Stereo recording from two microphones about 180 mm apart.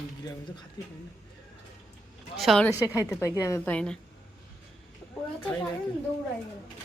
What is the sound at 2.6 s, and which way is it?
Speech, 10° right (ahead or behind).